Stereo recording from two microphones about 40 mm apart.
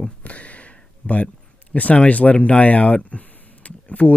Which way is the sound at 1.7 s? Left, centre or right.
Left.